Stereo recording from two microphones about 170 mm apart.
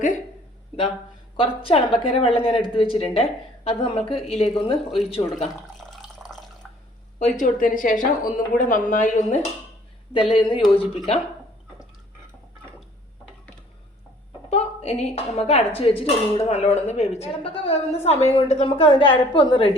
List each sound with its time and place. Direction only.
1.4 s a woman's voice: 30° left (ahead or behind)
5.7 s water: centre (ahead or behind)
7.2 s a woman's voice: 40° left (ahead or behind)
7.4 s a woman's voice: 55° left (ahead or behind)
10.1 s a woman's voice: 30° left (ahead or behind)
14.5 s a woman's voice: 40° left (ahead or behind)